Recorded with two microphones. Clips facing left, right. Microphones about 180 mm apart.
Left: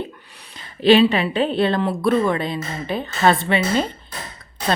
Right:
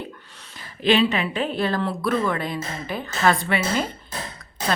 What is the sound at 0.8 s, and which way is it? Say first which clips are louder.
Speech: left 6 dB; 35° left (ahead or behind).